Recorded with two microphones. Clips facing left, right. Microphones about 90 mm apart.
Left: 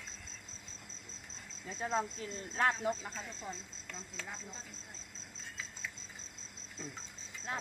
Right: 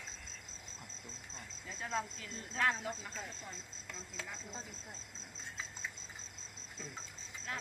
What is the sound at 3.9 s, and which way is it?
Speech, 5° right (ahead or behind).